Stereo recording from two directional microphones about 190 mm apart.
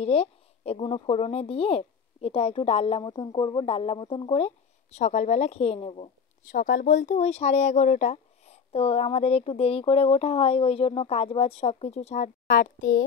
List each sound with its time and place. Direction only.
0.0 s speech: 35° left (ahead or behind)
6.5 s speech: 45° left (ahead or behind)